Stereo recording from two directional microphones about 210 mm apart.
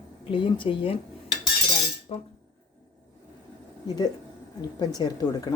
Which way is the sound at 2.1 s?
30° left (ahead or behind).